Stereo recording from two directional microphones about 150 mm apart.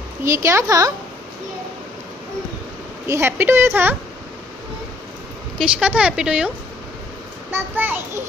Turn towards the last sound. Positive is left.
turn(degrees=-15)  # may be behind; listen again after turning